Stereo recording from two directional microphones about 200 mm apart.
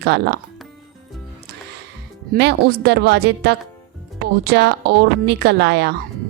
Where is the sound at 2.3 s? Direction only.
55° right (ahead or behind).